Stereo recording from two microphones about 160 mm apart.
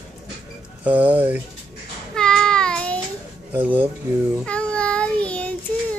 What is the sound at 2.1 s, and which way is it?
Child singing, 5° left (ahead or behind).